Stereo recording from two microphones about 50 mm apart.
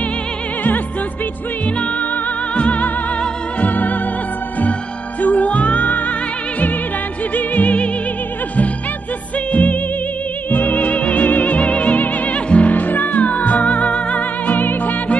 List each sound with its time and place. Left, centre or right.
2.5 s music: left
5.2 s music: left
7.3 s music: left
9.5 s music: left
14.5 s music: left